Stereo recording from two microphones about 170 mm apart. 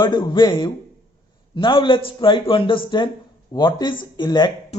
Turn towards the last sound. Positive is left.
turn(degrees=25)  # may be behind; listen again after turning